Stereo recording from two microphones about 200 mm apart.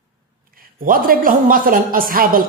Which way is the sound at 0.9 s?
45° right (ahead or behind).